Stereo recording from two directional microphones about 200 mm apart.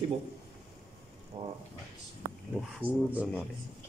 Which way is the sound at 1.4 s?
30° right (ahead or behind).